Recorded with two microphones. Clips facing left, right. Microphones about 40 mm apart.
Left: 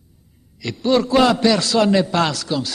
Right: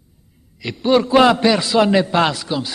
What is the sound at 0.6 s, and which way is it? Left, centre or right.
A man's voice, centre.